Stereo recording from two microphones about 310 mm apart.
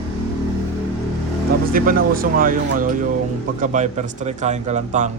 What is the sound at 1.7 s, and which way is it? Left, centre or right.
Speech, right.